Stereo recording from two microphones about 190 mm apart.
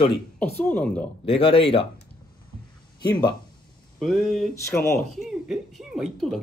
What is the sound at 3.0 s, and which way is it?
Speech, 20° left (ahead or behind).